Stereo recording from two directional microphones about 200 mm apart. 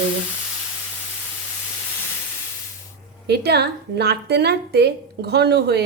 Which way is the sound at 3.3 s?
55° right (ahead or behind).